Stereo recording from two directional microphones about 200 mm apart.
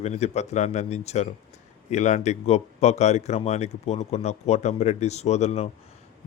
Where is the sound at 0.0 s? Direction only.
35° left (ahead or behind).